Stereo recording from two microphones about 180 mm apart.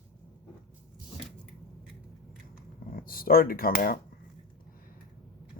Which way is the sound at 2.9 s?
55° left (ahead or behind).